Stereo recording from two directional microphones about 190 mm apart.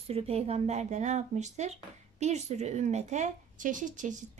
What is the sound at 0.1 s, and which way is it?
Speech, 30° right (ahead or behind).